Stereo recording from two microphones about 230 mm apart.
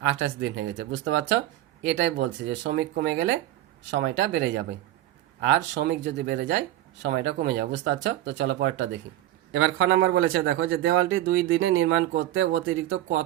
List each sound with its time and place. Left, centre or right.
0.2 s a man's voice: right